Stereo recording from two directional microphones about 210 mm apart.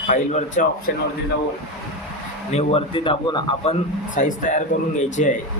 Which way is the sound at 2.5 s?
30° left (ahead or behind).